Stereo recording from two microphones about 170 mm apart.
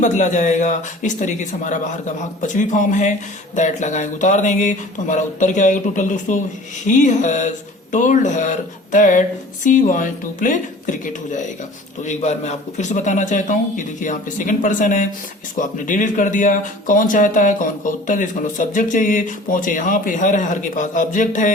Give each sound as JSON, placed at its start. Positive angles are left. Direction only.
{"t": 0.0, "sound": "speech", "side_deg": 45}